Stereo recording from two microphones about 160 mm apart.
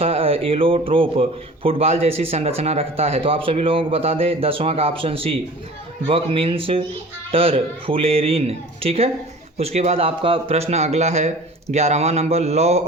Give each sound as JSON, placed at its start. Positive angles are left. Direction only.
{"t": 0.0, "sound": "speech", "side_deg": -35}